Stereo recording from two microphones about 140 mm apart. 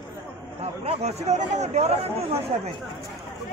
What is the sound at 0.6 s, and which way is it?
Speech, 50° right (ahead or behind).